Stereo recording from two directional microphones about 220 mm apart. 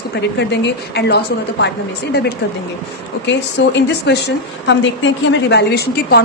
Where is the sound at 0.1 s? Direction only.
50° left (ahead or behind).